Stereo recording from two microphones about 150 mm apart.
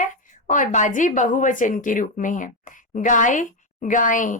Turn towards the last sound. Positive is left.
turn(degrees=60)  # may be behind; listen again after turning